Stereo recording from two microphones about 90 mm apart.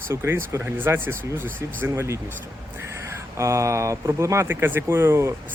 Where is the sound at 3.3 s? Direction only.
35° right (ahead or behind).